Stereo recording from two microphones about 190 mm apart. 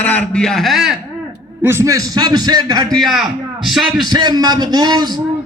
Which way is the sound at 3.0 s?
Centre (ahead or behind).